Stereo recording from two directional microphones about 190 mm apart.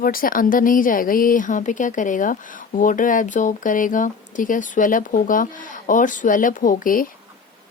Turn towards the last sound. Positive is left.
turn(degrees=45)  # may be behind; listen again after turning